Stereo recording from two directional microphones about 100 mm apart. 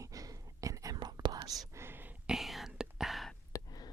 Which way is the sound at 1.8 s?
20° right (ahead or behind).